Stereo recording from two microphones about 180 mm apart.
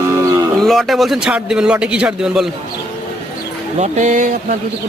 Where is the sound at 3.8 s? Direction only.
40° right (ahead or behind).